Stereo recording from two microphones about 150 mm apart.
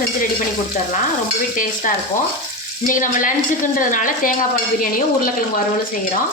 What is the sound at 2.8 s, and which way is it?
Speech, 60° left (ahead or behind).